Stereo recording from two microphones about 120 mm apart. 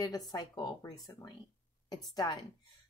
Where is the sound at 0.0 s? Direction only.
30° left (ahead or behind).